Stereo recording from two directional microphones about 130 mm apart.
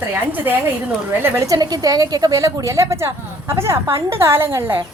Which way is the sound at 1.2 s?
25° right (ahead or behind).